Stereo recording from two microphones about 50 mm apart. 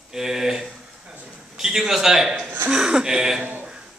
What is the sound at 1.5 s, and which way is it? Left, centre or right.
Music, centre.